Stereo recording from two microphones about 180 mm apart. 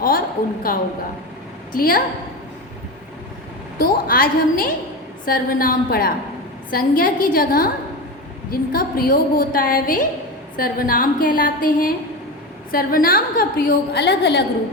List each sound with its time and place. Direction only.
0.7 s a woman's voice: 50° left (ahead or behind)
3.8 s a woman's voice: 55° left (ahead or behind); by 14.4 s 70° left (ahead or behind)